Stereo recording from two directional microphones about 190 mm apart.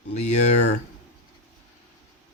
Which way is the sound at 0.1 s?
35° left (ahead or behind).